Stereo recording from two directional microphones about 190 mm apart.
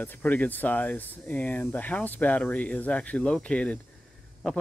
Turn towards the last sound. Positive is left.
turn(degrees=5)  # may be behind; listen again after turning